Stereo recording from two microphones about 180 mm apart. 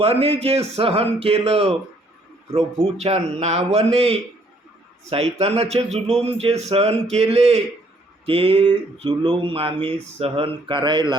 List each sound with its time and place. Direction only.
0.0 s a man's voice: 35° right (ahead or behind)